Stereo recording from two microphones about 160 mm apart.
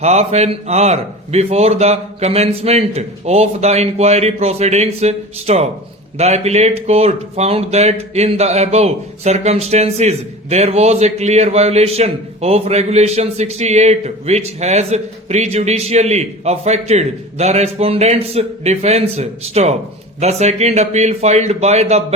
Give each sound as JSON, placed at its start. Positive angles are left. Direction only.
{"t": 0.0, "sound": "a man's voice", "side_deg": -45}